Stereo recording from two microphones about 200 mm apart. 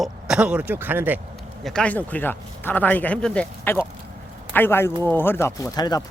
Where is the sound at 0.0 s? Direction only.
5° right (ahead or behind).